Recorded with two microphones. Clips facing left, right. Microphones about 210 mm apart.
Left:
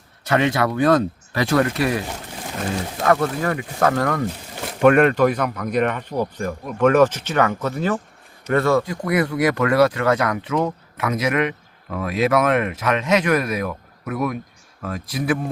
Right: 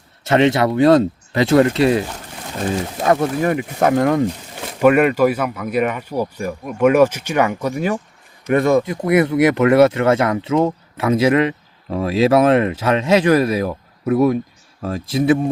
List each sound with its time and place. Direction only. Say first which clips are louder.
0.3 s speech: right 5 dB; 25° right (ahead or behind)
4.8 s speech: right 1 dB; 5° right (ahead or behind); by 15.4 s 25° right (ahead or behind)